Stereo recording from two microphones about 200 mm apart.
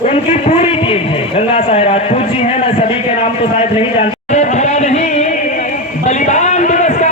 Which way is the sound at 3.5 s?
35° left (ahead or behind).